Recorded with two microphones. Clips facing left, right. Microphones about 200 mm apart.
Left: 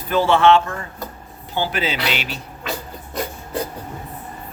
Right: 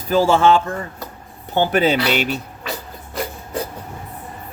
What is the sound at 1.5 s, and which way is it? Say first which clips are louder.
Speech: right 7 dB; 55° right (ahead or behind).